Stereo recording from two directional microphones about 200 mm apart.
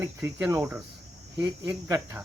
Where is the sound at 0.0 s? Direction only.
10° right (ahead or behind).